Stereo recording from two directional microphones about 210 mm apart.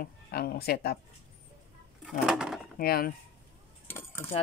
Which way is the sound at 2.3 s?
5° right (ahead or behind).